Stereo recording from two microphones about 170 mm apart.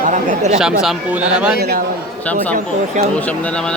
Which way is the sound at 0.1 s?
45° right (ahead or behind).